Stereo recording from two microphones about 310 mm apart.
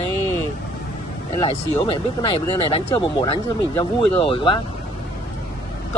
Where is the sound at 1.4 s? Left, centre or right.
Centre.